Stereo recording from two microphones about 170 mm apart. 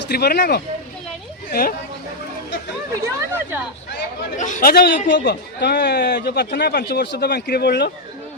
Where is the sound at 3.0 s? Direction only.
10° right (ahead or behind).